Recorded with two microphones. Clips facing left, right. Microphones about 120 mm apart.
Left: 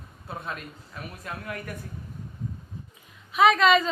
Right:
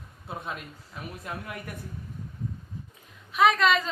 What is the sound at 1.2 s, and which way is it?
Speech, 20° right (ahead or behind).